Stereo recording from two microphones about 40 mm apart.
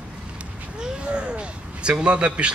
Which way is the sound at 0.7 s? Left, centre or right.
Right.